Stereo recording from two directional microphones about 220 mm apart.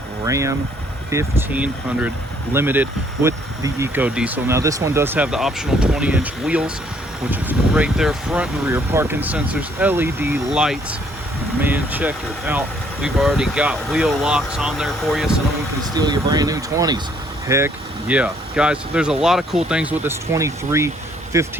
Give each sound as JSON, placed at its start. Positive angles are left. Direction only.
{"t": 0.3, "sound": "speech", "side_deg": -15}
{"t": 15.8, "sound": "speech", "side_deg": -20}